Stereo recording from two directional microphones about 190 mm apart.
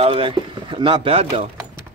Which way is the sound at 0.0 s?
30° right (ahead or behind).